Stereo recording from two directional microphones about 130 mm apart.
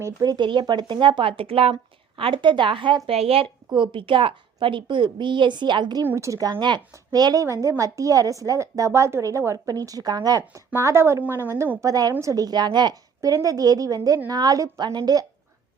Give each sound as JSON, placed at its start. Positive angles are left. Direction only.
{"t": 0.0, "sound": "a woman's voice", "side_deg": -30}
{"t": 6.1, "sound": "a woman's voice", "side_deg": -20}
{"t": 6.5, "sound": "a woman's voice", "side_deg": -35}